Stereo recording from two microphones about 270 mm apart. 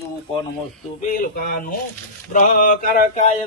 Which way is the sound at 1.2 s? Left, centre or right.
Left.